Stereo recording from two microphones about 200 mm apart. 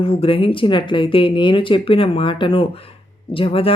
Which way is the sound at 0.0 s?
30° left (ahead or behind).